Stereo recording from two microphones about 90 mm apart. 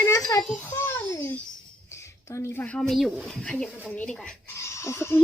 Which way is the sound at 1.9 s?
30° left (ahead or behind).